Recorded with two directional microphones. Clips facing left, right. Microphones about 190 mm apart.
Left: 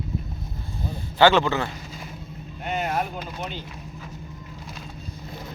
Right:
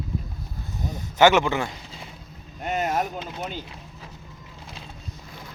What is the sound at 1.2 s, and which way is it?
Speech, 20° right (ahead or behind).